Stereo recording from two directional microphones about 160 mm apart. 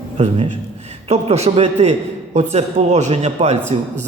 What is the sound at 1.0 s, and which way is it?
A man's voice, 40° right (ahead or behind).